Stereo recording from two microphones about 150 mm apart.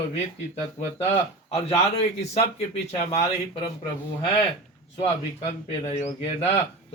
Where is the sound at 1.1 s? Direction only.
45° left (ahead or behind).